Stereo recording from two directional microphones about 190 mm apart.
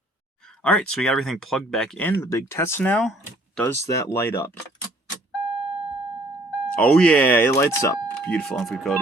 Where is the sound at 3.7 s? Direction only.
15° left (ahead or behind).